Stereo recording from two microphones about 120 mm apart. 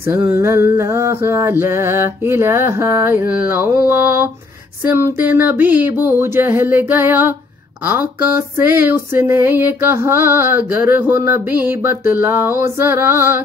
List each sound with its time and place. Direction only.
0.0 s female singing: 15° right (ahead or behind)
4.9 s a sound: 20° right (ahead or behind)
7.8 s female singing: 15° right (ahead or behind)